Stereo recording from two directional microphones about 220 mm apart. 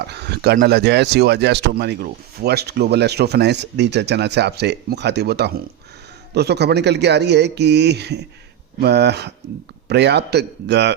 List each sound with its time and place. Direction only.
0.1 s speech: 50° right (ahead or behind)